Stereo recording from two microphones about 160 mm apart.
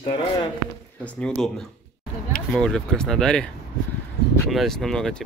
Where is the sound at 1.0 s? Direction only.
5° left (ahead or behind).